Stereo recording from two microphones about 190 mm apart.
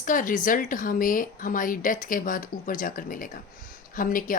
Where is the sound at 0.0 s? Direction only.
45° left (ahead or behind).